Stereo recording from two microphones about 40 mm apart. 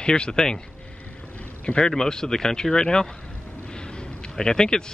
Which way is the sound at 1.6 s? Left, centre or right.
Left.